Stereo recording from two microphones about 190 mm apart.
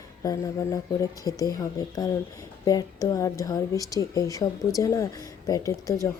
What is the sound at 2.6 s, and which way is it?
Speech, 20° left (ahead or behind).